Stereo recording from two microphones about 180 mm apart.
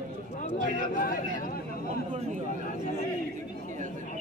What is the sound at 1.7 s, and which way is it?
Speech, 40° right (ahead or behind).